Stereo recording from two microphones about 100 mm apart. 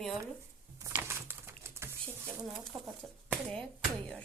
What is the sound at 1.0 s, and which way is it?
Bird, 25° right (ahead or behind).